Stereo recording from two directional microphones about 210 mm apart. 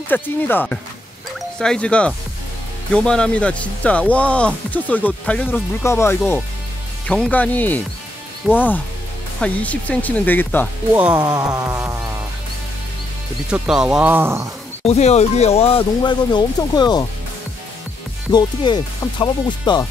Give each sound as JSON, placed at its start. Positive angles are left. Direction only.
{"t": 0.1, "sound": "speech", "side_deg": 10}
{"t": 11.1, "sound": "speech", "side_deg": -20}
{"t": 13.5, "sound": "speech", "side_deg": -5}
{"t": 14.8, "sound": "speech", "side_deg": 30}
{"t": 18.3, "sound": "speech", "side_deg": 20}